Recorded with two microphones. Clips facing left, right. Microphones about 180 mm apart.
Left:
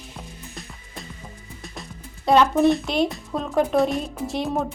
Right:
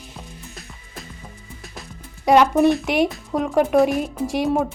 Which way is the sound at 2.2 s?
15° right (ahead or behind).